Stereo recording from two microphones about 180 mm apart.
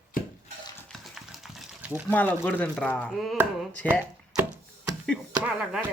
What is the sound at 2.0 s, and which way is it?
Speech, 10° left (ahead or behind).